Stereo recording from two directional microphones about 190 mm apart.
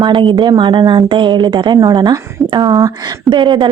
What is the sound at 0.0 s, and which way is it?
Speech, 25° right (ahead or behind).